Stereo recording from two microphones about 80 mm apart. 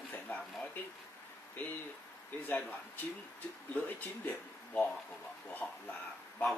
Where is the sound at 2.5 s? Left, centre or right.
Centre.